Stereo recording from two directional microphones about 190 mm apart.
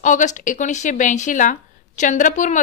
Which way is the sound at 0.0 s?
40° left (ahead or behind).